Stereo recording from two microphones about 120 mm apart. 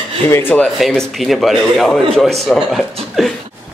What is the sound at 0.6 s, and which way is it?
A man's voice, 5° left (ahead or behind).